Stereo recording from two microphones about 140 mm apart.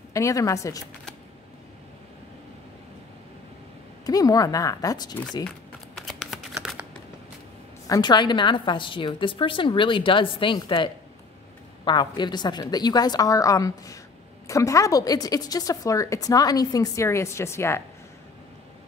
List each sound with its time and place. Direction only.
0.1 s a woman's voice: 25° left (ahead or behind)
4.0 s a woman's voice: 25° left (ahead or behind)
5.9 s shuffling cards: centre (ahead or behind)
7.8 s a woman's voice: 30° left (ahead or behind)